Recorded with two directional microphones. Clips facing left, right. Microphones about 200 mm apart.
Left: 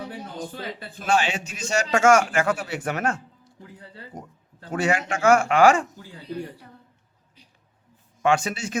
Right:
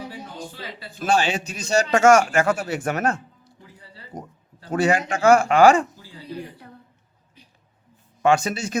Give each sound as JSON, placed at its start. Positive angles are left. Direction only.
{"t": 0.5, "sound": "speech", "side_deg": 55}
{"t": 1.0, "sound": "a man's voice", "side_deg": -35}
{"t": 4.1, "sound": "a sound", "side_deg": -40}
{"t": 4.7, "sound": "a man's voice", "side_deg": -35}
{"t": 8.2, "sound": "a man's voice", "side_deg": -40}